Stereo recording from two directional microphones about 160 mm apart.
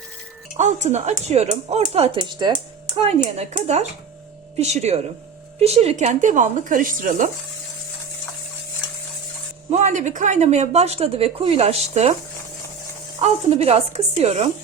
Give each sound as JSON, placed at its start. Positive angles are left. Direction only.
{"t": 0.5, "sound": "speech", "side_deg": -45}
{"t": 2.1, "sound": "speech", "side_deg": -25}
{"t": 3.3, "sound": "speech", "side_deg": -45}
{"t": 9.6, "sound": "speech", "side_deg": -45}
{"t": 13.1, "sound": "speech", "side_deg": -40}